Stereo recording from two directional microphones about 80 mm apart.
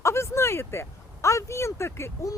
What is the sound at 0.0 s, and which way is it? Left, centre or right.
Speech, left.